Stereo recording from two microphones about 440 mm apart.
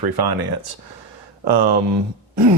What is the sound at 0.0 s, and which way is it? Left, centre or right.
Speech, right.